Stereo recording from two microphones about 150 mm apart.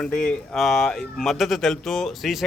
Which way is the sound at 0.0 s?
5° left (ahead or behind).